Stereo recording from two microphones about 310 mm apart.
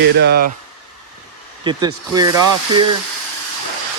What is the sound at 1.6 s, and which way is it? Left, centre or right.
Speech, centre.